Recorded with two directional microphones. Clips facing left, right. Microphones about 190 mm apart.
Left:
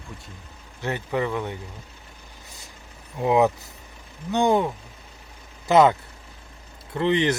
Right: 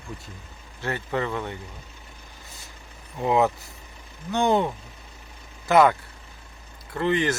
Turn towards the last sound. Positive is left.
turn(degrees=20)  # may be behind; listen again after turning